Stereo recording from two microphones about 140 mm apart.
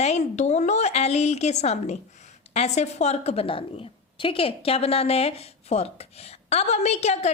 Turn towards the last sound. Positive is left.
turn(degrees=50)  # may be behind; listen again after turning